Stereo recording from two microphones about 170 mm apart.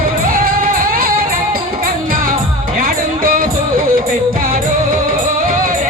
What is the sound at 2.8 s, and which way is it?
Music, 55° right (ahead or behind).